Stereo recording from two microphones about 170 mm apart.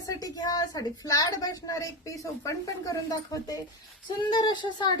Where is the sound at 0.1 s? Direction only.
20° left (ahead or behind).